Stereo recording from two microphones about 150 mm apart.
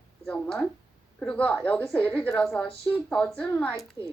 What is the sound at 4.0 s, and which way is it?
Speech, 20° right (ahead or behind).